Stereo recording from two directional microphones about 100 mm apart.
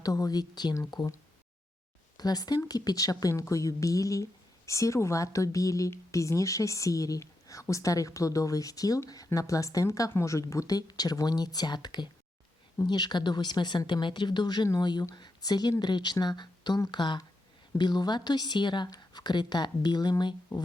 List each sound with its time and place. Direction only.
0.0 s a woman's voice: 35° left (ahead or behind)
2.1 s a woman's voice: 40° left (ahead or behind)